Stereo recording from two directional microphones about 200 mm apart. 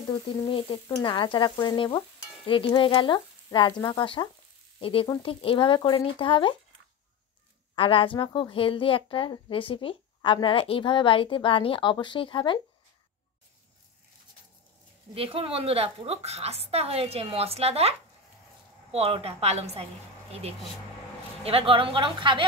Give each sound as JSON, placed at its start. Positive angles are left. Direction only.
{"t": 0.5, "sound": "a woman's voice", "side_deg": 25}
{"t": 7.7, "sound": "a woman's voice", "side_deg": 25}
{"t": 15.1, "sound": "a woman's voice", "side_deg": -30}